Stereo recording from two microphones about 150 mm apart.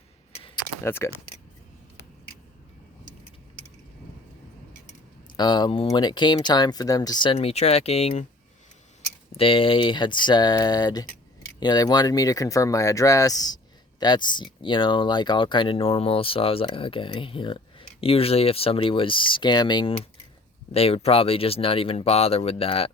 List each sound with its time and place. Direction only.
0.9 s speech: 15° left (ahead or behind)
5.4 s speech: 30° left (ahead or behind)
7.3 s speech: 45° left (ahead or behind)
9.3 s speech: 35° left (ahead or behind)